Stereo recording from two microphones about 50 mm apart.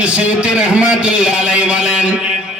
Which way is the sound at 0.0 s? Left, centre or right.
Right.